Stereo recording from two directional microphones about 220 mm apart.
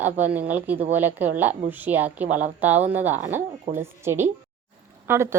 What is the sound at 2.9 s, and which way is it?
A woman's voice, 10° right (ahead or behind).